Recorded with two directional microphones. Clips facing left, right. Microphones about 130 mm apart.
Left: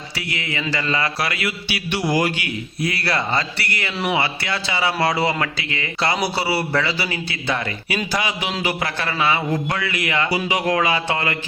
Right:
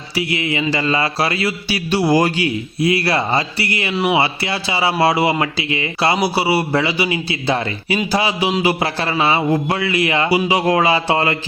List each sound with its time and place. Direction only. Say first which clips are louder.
0.2 s a man's voice: right 8 dB; 25° right (ahead or behind)
2.8 s speech: right 6 dB; 25° right (ahead or behind)
3.9 s speech: right 5 dB; 10° right (ahead or behind)
4.2 s speech: right 4 dB; 25° right (ahead or behind)